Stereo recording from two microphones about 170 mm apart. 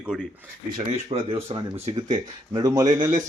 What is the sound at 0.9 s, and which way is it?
Speech, 35° right (ahead or behind).